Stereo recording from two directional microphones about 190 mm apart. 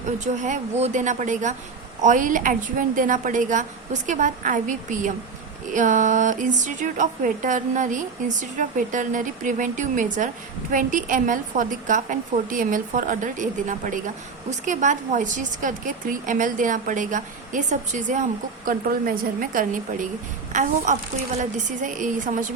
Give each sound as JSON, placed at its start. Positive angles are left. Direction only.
{"t": 0.4, "sound": "a woman's voice", "side_deg": -40}